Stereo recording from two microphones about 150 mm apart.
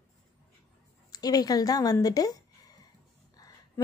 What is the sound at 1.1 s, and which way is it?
Speech, 25° left (ahead or behind).